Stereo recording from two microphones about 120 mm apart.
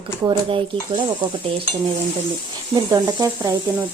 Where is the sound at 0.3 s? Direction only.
40° right (ahead or behind).